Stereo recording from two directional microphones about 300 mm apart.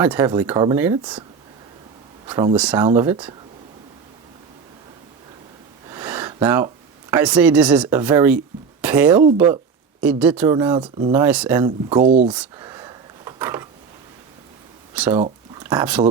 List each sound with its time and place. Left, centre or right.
0.0 s speech: centre
2.3 s speech: centre
2.6 s speech: centre
5.9 s a sound: centre
7.1 s speech: centre
11.9 s speech: centre
12.3 s a sound: centre
14.9 s speech: centre